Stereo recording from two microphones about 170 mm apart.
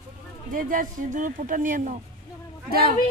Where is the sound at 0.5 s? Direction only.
55° right (ahead or behind).